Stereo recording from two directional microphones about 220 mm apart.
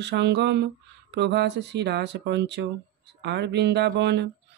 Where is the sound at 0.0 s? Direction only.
50° right (ahead or behind).